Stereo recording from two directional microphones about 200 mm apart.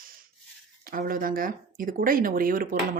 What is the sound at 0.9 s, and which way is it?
Speech, 45° right (ahead or behind).